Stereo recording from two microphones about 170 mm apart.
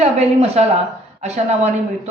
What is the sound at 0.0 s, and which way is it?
A man's voice, 40° right (ahead or behind).